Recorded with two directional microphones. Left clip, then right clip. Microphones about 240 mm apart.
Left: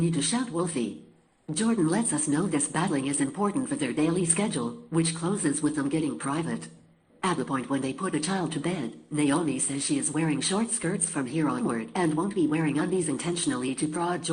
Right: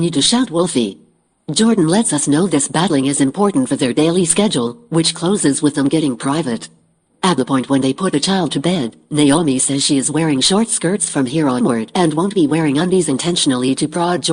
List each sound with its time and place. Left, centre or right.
0.1 s speech: right